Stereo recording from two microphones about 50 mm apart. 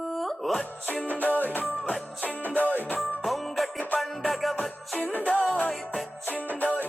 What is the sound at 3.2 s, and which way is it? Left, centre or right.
Music, centre.